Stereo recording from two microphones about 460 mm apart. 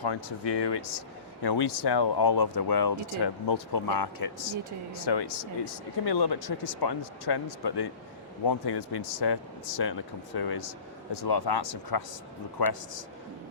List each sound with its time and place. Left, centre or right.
0.0 s speech: left